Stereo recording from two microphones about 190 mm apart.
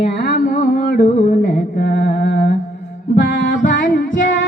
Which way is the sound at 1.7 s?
60° left (ahead or behind).